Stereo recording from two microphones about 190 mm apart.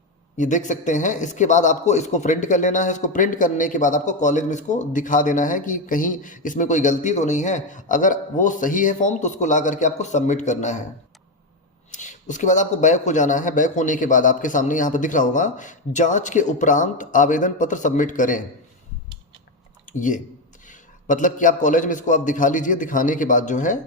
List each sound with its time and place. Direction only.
0.3 s a man's voice: 40° left (ahead or behind)
11.9 s a man's voice: 40° left (ahead or behind)
20.7 s a man's voice: 45° left (ahead or behind)